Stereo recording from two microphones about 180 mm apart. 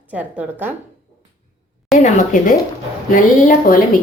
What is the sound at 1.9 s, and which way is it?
A woman's voice, 45° left (ahead or behind).